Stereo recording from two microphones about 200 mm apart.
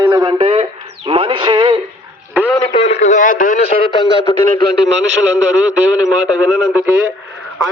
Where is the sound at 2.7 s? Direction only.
35° left (ahead or behind).